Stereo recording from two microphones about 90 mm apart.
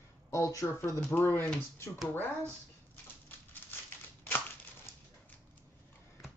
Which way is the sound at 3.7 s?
20° left (ahead or behind).